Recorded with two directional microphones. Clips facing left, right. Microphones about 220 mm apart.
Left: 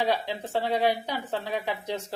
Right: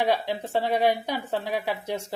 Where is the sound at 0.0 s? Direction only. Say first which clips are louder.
Right 2 dB; 15° right (ahead or behind).